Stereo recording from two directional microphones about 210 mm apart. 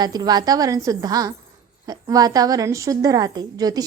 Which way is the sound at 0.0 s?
20° right (ahead or behind).